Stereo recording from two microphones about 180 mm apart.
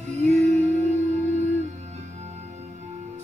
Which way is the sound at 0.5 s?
40° right (ahead or behind).